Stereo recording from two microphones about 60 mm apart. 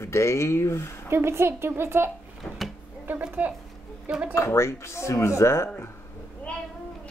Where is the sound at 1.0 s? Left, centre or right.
Right.